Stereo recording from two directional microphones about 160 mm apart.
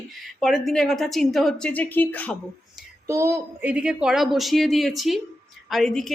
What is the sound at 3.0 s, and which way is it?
Speech, 20° right (ahead or behind).